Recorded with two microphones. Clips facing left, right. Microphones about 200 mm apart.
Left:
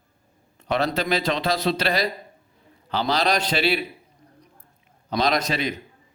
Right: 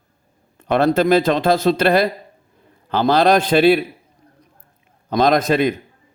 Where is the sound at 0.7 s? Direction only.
50° right (ahead or behind).